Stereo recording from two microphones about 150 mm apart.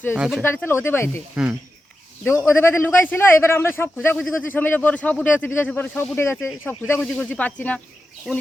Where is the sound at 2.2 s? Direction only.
15° left (ahead or behind).